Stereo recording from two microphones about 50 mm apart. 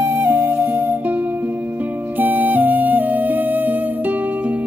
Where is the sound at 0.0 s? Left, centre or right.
Right.